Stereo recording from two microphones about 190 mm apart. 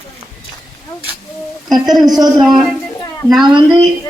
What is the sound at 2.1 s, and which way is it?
Speech, 20° right (ahead or behind).